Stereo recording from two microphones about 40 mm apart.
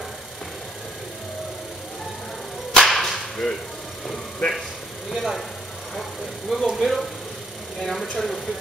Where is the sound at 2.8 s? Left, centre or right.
Centre.